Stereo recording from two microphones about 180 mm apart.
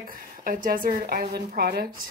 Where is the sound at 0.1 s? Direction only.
50° right (ahead or behind).